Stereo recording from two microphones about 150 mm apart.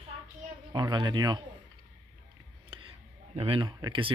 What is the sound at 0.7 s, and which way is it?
Speech, 30° right (ahead or behind).